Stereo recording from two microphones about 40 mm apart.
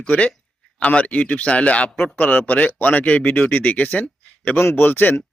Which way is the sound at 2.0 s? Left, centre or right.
Left.